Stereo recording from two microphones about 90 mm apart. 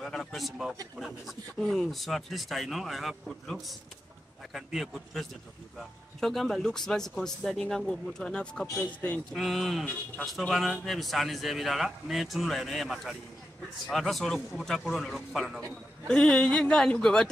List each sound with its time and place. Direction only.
0.0 s speech: 5° left (ahead or behind)
9.3 s speech: centre (ahead or behind)